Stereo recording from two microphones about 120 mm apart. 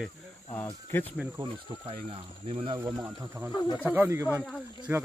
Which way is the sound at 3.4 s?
15° right (ahead or behind).